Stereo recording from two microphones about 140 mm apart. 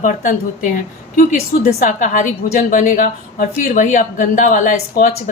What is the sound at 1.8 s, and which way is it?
A woman's voice, 65° left (ahead or behind).